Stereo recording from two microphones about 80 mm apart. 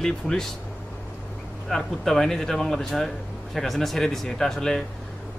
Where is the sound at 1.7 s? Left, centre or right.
Centre.